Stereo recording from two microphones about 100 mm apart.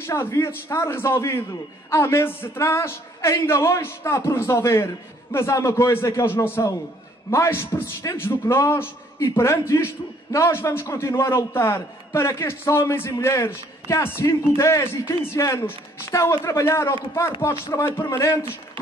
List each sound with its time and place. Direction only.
0.0 s a man's voice: 25° left (ahead or behind)